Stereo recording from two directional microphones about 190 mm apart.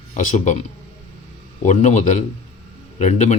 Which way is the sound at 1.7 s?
35° left (ahead or behind).